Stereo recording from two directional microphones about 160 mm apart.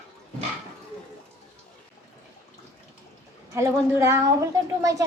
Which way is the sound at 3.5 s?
15° right (ahead or behind).